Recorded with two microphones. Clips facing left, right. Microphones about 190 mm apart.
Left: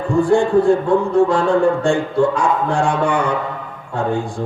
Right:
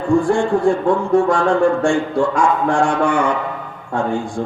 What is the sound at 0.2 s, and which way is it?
Speech, 60° left (ahead or behind).